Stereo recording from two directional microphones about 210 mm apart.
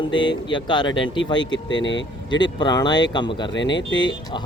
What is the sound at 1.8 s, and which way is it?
Speech, 60° left (ahead or behind).